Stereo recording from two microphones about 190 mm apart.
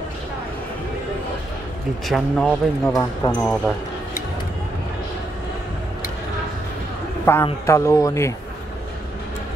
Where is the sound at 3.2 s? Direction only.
25° left (ahead or behind).